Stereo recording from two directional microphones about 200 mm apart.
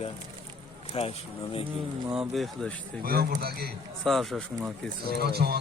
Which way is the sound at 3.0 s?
50° right (ahead or behind).